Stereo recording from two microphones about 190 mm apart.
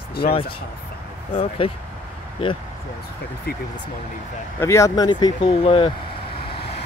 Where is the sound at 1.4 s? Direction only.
30° left (ahead or behind).